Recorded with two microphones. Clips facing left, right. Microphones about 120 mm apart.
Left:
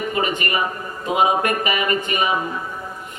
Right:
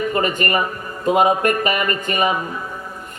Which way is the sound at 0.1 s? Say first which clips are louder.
Right 3 dB; 45° right (ahead or behind).